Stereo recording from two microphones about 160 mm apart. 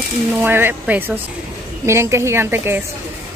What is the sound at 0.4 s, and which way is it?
Speech, 10° right (ahead or behind).